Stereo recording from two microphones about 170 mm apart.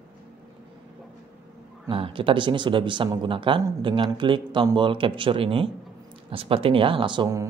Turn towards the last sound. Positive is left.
turn(degrees=-25)  # may be behind; listen again after turning